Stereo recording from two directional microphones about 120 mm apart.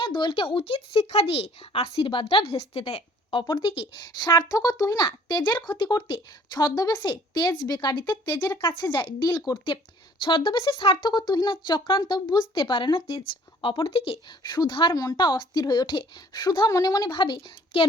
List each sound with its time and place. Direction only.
0.0 s speech: 40° left (ahead or behind)
8.4 s speech: 15° left (ahead or behind)
8.6 s speech: 40° left (ahead or behind)
14.9 s speech: 30° left (ahead or behind)